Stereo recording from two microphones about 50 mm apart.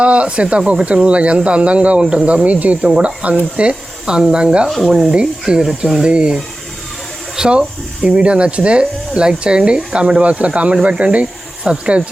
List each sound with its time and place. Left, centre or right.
0.0 s speech: right
4.9 s speech: centre; by 12.0 s right